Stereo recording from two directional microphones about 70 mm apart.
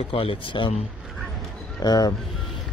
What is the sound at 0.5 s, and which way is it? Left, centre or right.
Speech, left.